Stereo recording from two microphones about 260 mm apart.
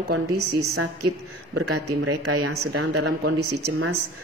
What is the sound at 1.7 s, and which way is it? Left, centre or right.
Speech, right.